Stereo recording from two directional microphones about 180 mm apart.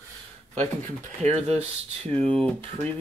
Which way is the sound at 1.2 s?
40° right (ahead or behind).